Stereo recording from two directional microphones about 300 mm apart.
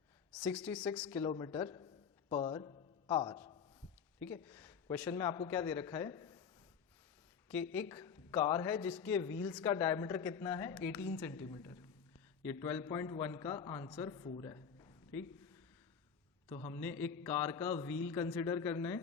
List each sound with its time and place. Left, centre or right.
0.5 s a man's voice: centre
7.7 s a man's voice: centre
16.5 s a man's voice: centre